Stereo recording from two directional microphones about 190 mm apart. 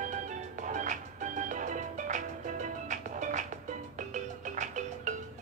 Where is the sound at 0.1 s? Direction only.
40° right (ahead or behind).